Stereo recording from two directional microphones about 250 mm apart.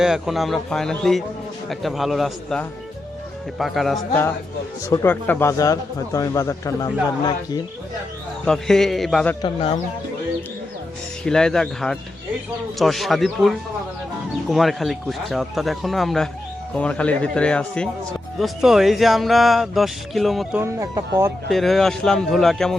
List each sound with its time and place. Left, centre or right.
0.0 s a man's voice: centre
8.4 s speech: centre
9.4 s speech: left
11.2 s speech: centre
14.5 s speech: centre
21.5 s speech: centre